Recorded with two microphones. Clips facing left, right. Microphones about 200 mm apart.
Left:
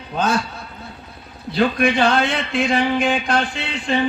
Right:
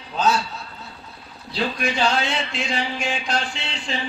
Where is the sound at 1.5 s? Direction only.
55° left (ahead or behind).